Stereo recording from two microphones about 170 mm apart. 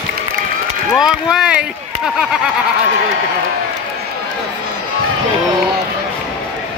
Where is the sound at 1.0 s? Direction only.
Centre (ahead or behind).